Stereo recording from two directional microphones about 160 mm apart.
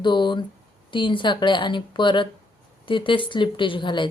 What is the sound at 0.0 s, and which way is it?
A woman's voice, 30° left (ahead or behind).